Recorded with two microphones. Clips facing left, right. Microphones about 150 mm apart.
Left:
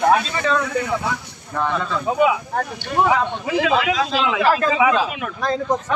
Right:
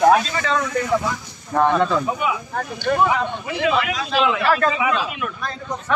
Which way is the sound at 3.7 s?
90° left.